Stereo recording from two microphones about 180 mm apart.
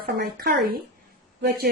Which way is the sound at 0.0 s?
60° right (ahead or behind).